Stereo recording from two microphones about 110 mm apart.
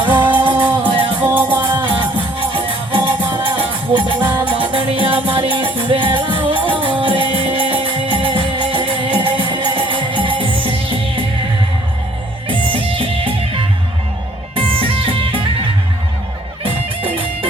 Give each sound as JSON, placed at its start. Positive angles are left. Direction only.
{"t": 0.1, "sound": "music", "side_deg": -15}
{"t": 0.6, "sound": "music", "side_deg": -50}
{"t": 1.2, "sound": "music", "side_deg": -15}
{"t": 1.8, "sound": "music", "side_deg": -50}
{"t": 12.5, "sound": "music", "side_deg": -55}
{"t": 16.6, "sound": "music", "side_deg": -55}